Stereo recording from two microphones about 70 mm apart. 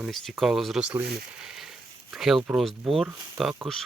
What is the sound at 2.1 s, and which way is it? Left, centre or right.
Speech, centre.